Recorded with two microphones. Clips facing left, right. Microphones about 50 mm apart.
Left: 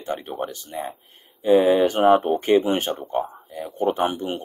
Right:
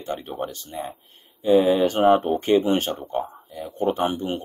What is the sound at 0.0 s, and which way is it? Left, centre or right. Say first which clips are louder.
Speech: left 1 dB; centre.